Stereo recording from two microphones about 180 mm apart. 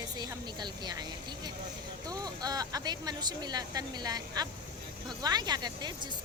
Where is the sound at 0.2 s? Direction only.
25° right (ahead or behind).